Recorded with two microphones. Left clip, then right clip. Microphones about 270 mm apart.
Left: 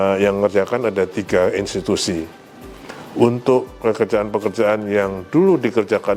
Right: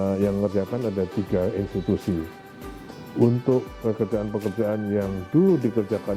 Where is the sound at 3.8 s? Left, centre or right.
Centre.